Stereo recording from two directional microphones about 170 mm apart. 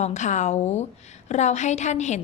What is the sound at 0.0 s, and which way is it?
A woman's voice, 45° left (ahead or behind).